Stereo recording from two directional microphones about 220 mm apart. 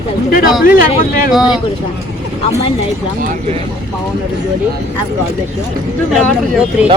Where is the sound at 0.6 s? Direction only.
40° left (ahead or behind).